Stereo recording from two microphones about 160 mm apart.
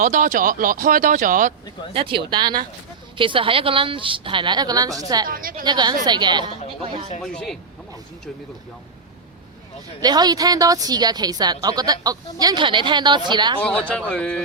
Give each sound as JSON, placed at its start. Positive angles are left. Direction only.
{"t": 0.0, "sound": "speech", "side_deg": -55}
{"t": 1.9, "sound": "a woman's voice", "side_deg": -35}
{"t": 5.3, "sound": "speech", "side_deg": -60}
{"t": 5.6, "sound": "a woman's voice", "side_deg": -25}
{"t": 7.2, "sound": "speech", "side_deg": 5}
{"t": 10.0, "sound": "a woman's voice", "side_deg": -25}
{"t": 13.6, "sound": "a man's voice", "side_deg": 5}